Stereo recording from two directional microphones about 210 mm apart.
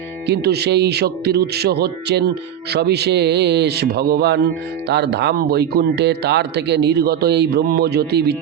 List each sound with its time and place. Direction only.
0.3 s speech: 50° right (ahead or behind)